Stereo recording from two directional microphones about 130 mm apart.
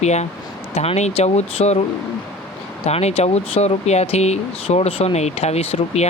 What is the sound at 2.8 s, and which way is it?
Speech, 55° left (ahead or behind).